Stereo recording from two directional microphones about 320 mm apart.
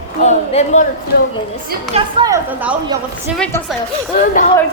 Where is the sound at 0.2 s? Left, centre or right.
Left.